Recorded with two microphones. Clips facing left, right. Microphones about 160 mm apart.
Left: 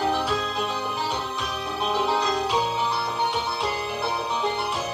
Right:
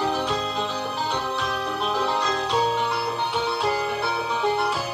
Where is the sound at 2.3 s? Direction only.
5° left (ahead or behind).